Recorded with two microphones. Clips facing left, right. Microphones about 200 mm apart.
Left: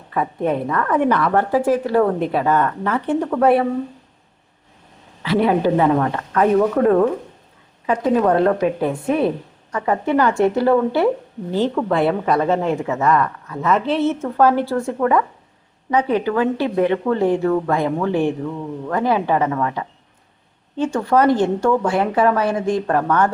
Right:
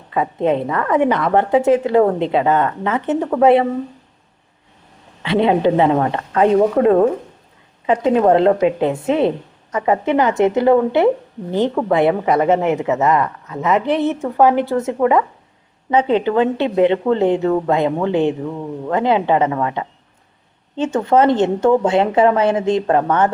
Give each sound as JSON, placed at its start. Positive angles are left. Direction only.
{"t": 0.1, "sound": "speech", "side_deg": -20}
{"t": 5.2, "sound": "speech", "side_deg": -25}